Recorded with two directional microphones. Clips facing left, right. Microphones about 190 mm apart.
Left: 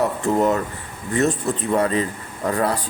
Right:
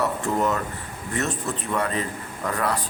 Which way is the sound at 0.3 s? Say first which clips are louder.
Left 6 dB; 30° left (ahead or behind).